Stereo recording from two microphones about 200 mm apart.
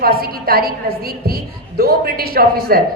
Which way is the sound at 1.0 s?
50° right (ahead or behind).